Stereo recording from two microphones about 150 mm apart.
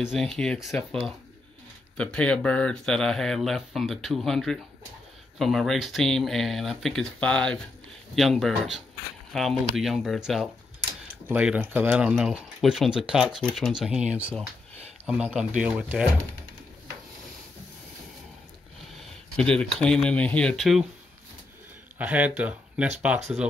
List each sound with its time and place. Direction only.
0.0 s speech: centre (ahead or behind)
11.2 s speech: 10° right (ahead or behind)
15.0 s speech: 5° right (ahead or behind)
18.9 s speech: 5° left (ahead or behind)
21.9 s speech: 10° right (ahead or behind)